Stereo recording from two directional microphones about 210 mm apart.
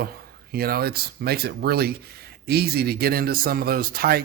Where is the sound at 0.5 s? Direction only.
45° right (ahead or behind).